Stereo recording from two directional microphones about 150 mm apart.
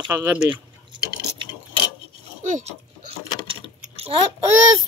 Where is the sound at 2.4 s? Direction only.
50° right (ahead or behind).